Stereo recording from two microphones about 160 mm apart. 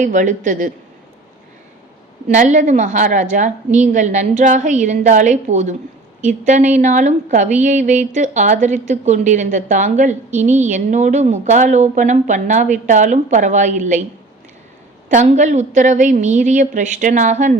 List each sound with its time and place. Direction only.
0.0 s a woman's voice: 50° right (ahead or behind)
2.3 s a woman's voice: 50° right (ahead or behind)
15.1 s a woman's voice: 45° right (ahead or behind)